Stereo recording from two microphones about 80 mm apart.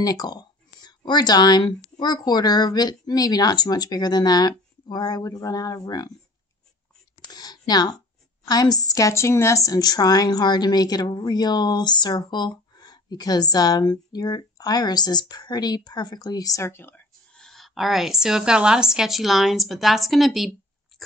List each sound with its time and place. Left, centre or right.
0.0 s a woman's voice: left
7.2 s a sound: left
8.5 s a woman's voice: left
16.6 s speech: left
17.3 s a woman's voice: centre